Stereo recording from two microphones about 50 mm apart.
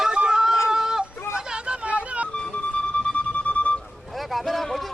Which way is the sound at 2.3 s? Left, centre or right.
Centre.